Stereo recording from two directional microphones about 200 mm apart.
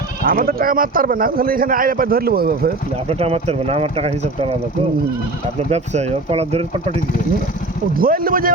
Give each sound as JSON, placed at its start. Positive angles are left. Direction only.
{"t": 0.3, "sound": "a man's voice", "side_deg": -45}
{"t": 3.1, "sound": "speech", "side_deg": -30}
{"t": 5.7, "sound": "speech", "side_deg": -35}
{"t": 7.9, "sound": "a man's voice", "side_deg": -45}